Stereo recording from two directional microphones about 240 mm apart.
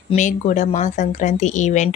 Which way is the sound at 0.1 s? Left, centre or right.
Left.